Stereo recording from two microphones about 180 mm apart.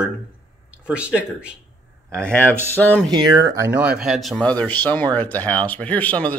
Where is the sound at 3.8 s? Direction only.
5° right (ahead or behind).